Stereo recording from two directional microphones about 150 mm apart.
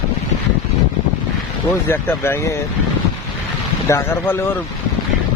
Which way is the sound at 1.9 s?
15° left (ahead or behind).